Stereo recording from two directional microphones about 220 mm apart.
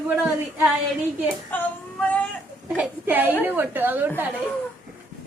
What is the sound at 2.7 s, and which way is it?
A woman's voice, 10° right (ahead or behind).